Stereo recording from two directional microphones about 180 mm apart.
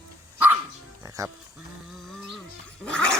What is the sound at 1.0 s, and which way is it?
Music, 15° right (ahead or behind).